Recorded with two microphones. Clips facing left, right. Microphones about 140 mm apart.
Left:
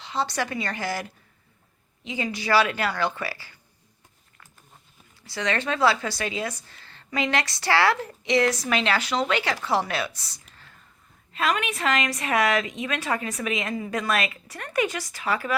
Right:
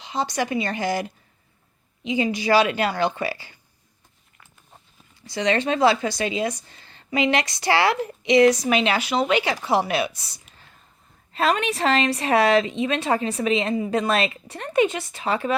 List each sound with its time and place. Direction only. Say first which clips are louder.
0.0 s a woman's voice: right 2 dB; 15° right (ahead or behind)
5.3 s a woman's voice: right 5 dB; 20° right (ahead or behind)
10.2 s a sound: right 1 dB; 15° right (ahead or behind)
11.3 s a woman's voice: right 4 dB; 30° right (ahead or behind)